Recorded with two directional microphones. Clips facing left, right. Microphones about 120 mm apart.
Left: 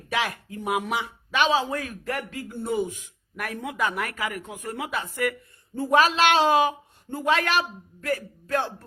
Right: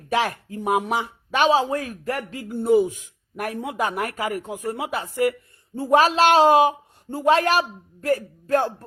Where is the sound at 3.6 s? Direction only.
35° right (ahead or behind).